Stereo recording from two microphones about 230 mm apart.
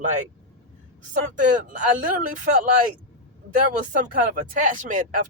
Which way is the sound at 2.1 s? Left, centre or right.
Right.